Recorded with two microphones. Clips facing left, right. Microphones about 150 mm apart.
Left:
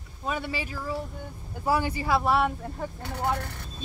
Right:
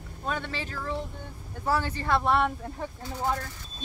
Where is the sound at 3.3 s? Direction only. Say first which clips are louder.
Left 2 dB; 65° left (ahead or behind).